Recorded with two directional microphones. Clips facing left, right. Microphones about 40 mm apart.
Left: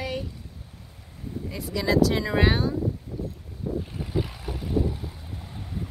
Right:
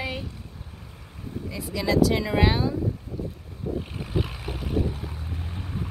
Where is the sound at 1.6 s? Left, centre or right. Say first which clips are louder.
Even; centre.